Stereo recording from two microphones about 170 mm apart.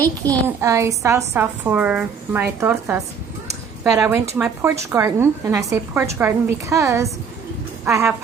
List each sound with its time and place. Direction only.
0.4 s a woman's voice: 15° right (ahead or behind)
4.4 s a woman's voice: 5° right (ahead or behind)